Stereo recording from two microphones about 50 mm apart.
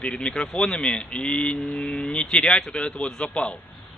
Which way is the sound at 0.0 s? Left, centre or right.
Centre.